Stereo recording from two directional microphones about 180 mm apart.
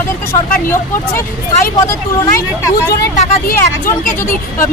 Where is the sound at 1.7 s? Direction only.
20° left (ahead or behind).